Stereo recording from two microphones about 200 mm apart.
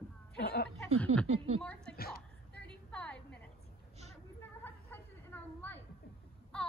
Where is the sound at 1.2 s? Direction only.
30° right (ahead or behind).